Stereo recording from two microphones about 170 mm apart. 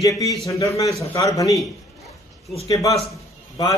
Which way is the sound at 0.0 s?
20° left (ahead or behind).